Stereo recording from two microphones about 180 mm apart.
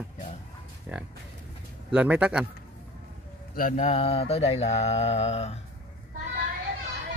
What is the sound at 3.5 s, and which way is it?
Speech, 50° left (ahead or behind).